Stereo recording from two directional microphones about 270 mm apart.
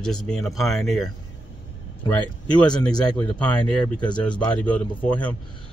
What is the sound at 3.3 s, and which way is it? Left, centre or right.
Speech, centre.